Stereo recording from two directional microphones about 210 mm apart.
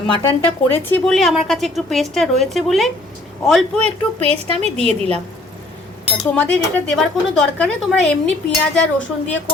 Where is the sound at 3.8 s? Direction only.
30° right (ahead or behind).